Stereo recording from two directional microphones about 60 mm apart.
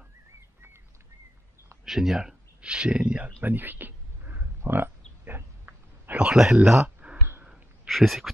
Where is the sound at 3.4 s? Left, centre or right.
Right.